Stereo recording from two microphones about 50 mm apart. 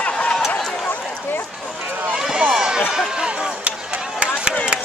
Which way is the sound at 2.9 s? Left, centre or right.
Centre.